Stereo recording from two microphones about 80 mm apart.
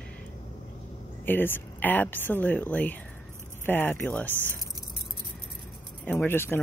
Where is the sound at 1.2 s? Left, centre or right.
Left.